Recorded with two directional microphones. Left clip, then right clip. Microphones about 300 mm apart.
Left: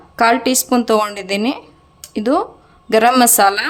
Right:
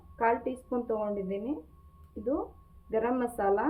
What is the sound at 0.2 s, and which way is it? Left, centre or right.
Speech, left.